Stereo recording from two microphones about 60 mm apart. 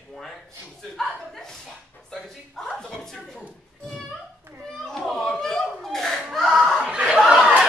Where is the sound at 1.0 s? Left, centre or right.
Centre.